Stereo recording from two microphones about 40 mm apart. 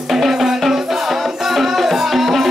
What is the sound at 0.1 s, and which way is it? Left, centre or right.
Music, centre.